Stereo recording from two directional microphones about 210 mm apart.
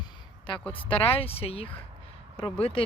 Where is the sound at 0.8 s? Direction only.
25° left (ahead or behind).